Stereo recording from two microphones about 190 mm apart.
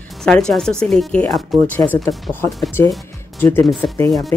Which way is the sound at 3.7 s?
Centre (ahead or behind).